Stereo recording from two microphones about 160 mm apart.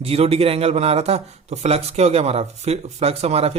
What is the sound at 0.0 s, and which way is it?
Speech, 40° right (ahead or behind).